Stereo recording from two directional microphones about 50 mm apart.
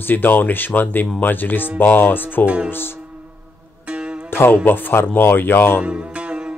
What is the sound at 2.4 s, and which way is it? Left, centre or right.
Speech, right.